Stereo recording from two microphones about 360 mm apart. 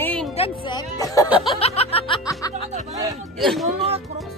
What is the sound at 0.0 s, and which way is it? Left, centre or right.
Music, centre.